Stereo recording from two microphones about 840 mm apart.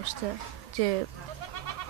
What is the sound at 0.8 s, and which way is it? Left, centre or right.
Speech, right.